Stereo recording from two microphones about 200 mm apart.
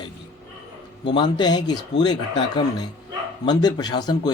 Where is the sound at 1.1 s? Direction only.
20° left (ahead or behind).